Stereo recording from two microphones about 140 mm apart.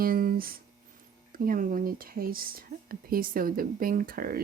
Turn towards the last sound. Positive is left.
turn(degrees=-90)